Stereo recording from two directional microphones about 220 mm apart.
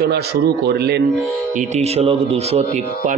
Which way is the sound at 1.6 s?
30° right (ahead or behind).